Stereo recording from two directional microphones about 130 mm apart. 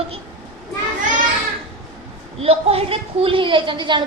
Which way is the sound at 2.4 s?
50° right (ahead or behind).